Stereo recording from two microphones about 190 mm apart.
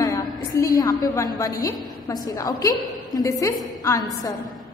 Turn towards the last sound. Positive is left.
turn(degrees=15)  # may be behind; listen again after turning